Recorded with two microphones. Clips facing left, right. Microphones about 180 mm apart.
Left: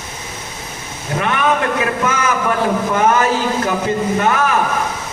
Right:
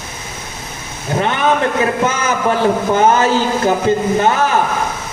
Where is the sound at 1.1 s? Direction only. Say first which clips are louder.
Right 2 dB; 30° right (ahead or behind).